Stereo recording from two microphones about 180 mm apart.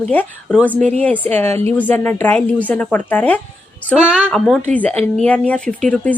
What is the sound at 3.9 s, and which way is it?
Speech, 10° right (ahead or behind).